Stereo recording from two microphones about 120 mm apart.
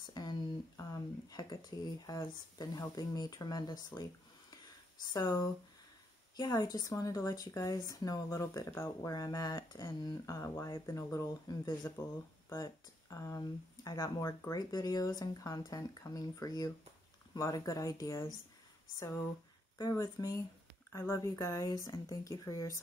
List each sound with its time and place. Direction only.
0.0 s speech: 35° left (ahead or behind)